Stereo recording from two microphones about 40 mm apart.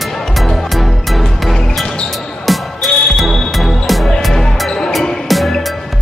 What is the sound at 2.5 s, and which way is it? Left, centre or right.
Music, centre.